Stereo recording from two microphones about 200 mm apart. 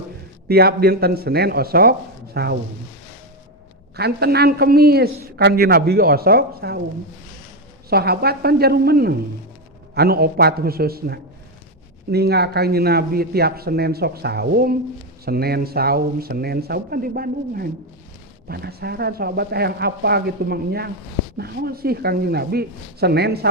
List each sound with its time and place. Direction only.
0.4 s a man's voice: 50° right (ahead or behind)
3.9 s a man's voice: 55° right (ahead or behind)
7.9 s a man's voice: 50° right (ahead or behind)